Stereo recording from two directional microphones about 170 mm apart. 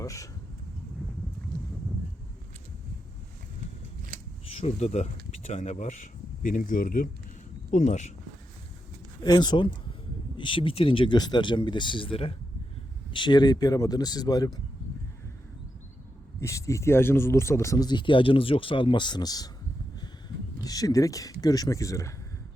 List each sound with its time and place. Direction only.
0.0 s speech: 20° left (ahead or behind)
4.4 s speech: 40° left (ahead or behind)
9.2 s speech: 25° left (ahead or behind)
16.4 s speech: 20° left (ahead or behind)
20.7 s speech: 20° left (ahead or behind)